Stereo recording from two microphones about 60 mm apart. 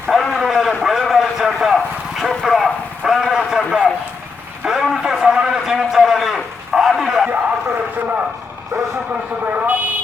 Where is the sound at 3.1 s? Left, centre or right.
Centre.